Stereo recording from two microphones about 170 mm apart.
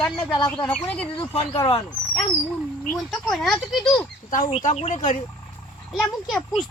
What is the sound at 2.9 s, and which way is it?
Speech, centre (ahead or behind).